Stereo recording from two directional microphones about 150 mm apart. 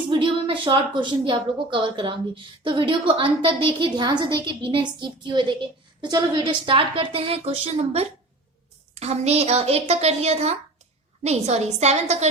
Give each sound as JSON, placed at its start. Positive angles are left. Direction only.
{"t": 0.1, "sound": "a woman's voice", "side_deg": -35}